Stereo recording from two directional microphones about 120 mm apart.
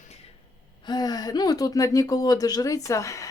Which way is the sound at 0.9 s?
35° left (ahead or behind).